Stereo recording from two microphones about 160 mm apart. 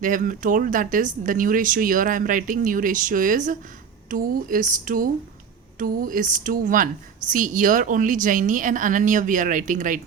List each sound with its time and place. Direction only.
0.0 s a woman's voice: 55° right (ahead or behind)